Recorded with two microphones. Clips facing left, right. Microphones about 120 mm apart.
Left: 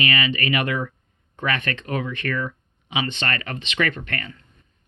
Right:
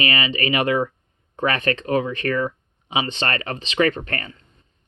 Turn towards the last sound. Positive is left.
turn(degrees=-30)  # may be behind; listen again after turning